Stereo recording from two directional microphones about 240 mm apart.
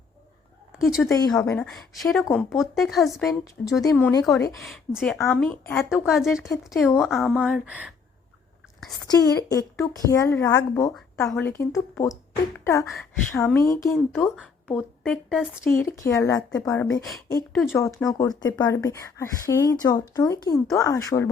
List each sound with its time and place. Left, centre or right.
0.8 s a woman's voice: centre
1.0 s a woman's voice: centre
3.8 s speech: centre
4.6 s a woman's voice: centre
9.6 s speech: centre
16.0 s speech: centre